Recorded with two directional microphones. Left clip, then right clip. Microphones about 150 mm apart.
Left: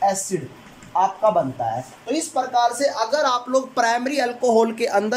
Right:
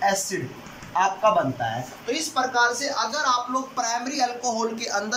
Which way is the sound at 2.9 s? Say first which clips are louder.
Left 3 dB; 90° left.